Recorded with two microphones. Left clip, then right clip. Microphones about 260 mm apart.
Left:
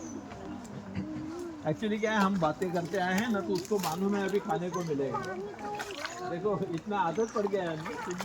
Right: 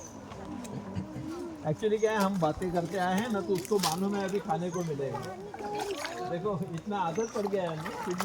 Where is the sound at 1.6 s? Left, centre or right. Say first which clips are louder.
Right 3 dB; right.